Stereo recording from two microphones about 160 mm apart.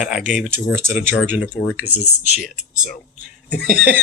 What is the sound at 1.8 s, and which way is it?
Speech, 45° left (ahead or behind).